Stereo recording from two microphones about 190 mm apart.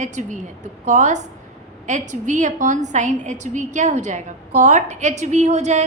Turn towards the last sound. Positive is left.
turn(degrees=-35)  # may be behind; listen again after turning